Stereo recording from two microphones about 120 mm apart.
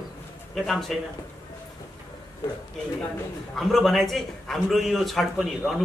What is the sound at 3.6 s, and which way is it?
A man's voice, centre (ahead or behind).